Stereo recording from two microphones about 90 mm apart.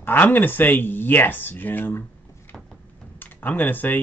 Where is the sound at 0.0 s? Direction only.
25° left (ahead or behind).